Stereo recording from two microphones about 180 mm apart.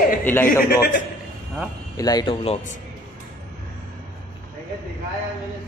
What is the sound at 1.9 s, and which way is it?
Speech, 20° left (ahead or behind).